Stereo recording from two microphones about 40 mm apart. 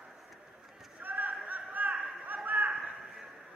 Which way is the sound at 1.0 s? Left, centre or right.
Right.